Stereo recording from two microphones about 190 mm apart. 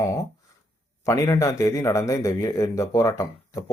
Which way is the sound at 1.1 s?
15° left (ahead or behind).